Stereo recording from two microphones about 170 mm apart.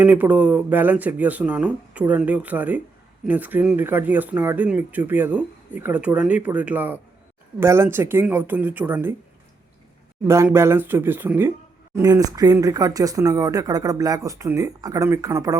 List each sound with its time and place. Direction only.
0.0 s speech: 10° right (ahead or behind)
10.2 s speech: 15° right (ahead or behind)